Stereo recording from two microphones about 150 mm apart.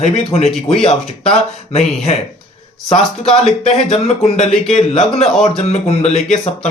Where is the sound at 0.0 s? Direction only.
45° left (ahead or behind).